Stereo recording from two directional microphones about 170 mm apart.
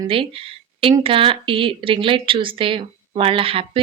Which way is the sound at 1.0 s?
30° right (ahead or behind).